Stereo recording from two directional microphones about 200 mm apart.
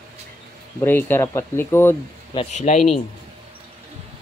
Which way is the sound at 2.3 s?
30° left (ahead or behind).